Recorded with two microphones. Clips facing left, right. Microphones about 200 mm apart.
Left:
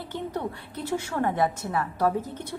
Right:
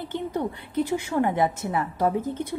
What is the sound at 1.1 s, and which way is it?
A woman's voice, 20° right (ahead or behind).